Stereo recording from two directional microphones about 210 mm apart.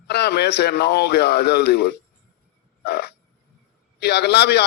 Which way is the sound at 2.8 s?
50° left (ahead or behind).